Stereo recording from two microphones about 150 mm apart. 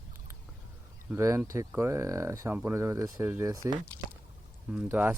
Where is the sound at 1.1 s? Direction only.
20° right (ahead or behind).